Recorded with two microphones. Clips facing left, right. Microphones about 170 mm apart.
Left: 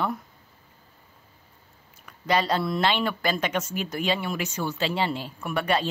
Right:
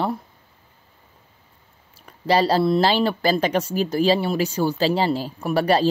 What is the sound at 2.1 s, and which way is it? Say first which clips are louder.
Speech: right 6 dB; 35° right (ahead or behind).